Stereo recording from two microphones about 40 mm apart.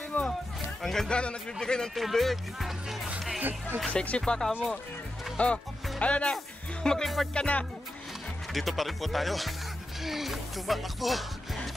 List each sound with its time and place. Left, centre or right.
0.1 s music: left
0.8 s speech: centre
2.0 s speech: centre
3.9 s speech: left
4.3 s speech: centre
5.4 s speech: left
6.8 s speech: centre
7.3 s speech: left
8.5 s speech: centre
10.0 s music: centre